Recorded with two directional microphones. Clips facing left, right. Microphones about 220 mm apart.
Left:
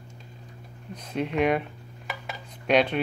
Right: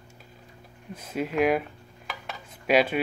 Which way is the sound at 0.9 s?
5° right (ahead or behind).